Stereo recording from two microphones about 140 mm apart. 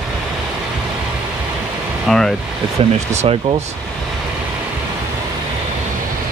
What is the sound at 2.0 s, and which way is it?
Speech, 5° left (ahead or behind).